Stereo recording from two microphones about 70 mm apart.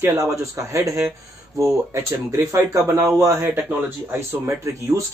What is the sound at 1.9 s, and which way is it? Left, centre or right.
Speech, right.